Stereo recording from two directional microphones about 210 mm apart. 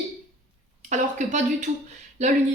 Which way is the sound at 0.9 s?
35° right (ahead or behind).